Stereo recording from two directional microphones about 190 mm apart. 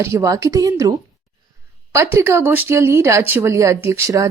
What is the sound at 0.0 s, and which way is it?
Speech, 15° right (ahead or behind).